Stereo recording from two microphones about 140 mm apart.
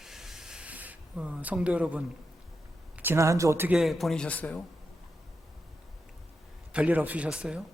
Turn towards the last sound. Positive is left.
turn(degrees=-5)  # may be behind; listen again after turning